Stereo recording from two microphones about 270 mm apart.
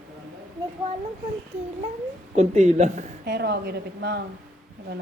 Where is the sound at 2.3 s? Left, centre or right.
Right.